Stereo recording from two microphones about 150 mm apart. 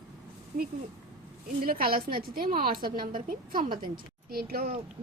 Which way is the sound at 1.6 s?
75° right (ahead or behind).